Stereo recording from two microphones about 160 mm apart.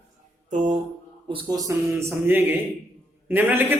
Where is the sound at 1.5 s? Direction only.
20° right (ahead or behind).